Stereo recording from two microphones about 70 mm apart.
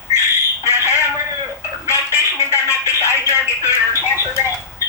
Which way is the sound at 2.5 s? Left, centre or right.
Left.